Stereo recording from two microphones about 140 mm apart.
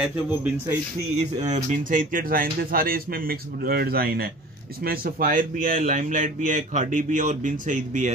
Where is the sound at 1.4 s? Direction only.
60° right (ahead or behind); by 5.8 s 80° right.